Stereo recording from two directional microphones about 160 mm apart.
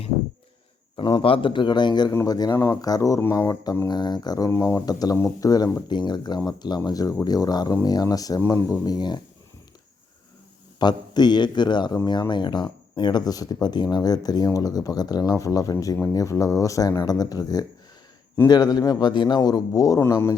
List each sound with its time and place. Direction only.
0.9 s speech: 30° left (ahead or behind)
10.8 s speech: 25° left (ahead or behind)